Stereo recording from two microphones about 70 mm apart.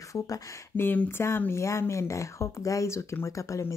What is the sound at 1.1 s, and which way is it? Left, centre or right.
Speech, left.